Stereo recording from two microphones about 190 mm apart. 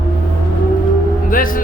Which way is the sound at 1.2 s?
45° left (ahead or behind).